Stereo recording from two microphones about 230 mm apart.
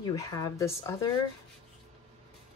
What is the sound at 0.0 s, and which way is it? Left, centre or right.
Speech, centre.